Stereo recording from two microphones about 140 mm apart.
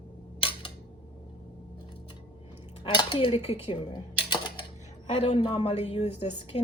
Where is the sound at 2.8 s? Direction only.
35° left (ahead or behind).